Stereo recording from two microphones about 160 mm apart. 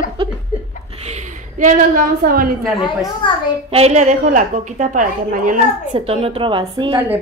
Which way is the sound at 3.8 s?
45° right (ahead or behind).